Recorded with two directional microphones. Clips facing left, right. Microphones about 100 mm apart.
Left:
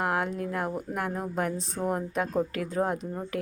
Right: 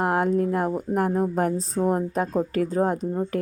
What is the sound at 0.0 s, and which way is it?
Speech, 40° right (ahead or behind).